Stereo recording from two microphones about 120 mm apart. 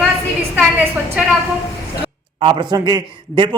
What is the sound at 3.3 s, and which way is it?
Speech, 45° right (ahead or behind).